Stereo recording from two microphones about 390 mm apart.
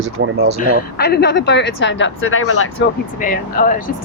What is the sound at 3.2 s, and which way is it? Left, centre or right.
Speech, left.